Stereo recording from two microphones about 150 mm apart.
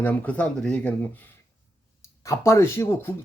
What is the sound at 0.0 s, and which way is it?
Speech, 10° left (ahead or behind).